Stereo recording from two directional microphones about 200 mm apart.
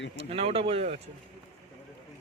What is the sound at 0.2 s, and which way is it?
Speech, 30° right (ahead or behind).